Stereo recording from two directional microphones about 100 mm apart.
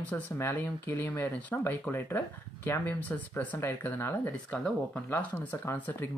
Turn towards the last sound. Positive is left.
turn(degrees=20)  # may be behind; listen again after turning